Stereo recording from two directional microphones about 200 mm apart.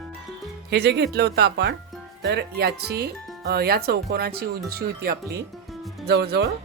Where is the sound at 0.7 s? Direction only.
55° right (ahead or behind).